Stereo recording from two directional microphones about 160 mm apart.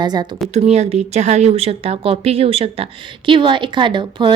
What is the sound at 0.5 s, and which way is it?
A woman's voice, 45° right (ahead or behind).